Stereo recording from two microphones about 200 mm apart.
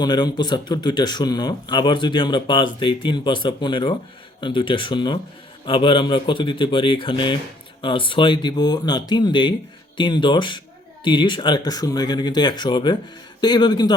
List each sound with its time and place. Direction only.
0.0 s a man's voice: 20° left (ahead or behind)